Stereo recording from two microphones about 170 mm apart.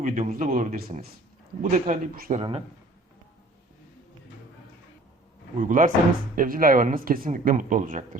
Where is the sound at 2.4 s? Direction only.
35° right (ahead or behind).